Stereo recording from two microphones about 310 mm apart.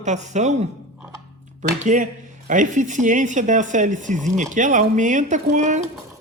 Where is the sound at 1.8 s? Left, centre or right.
Right.